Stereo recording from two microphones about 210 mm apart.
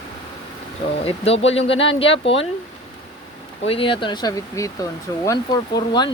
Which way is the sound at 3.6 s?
25° left (ahead or behind).